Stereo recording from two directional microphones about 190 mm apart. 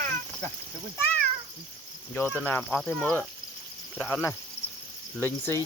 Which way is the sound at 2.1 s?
10° left (ahead or behind).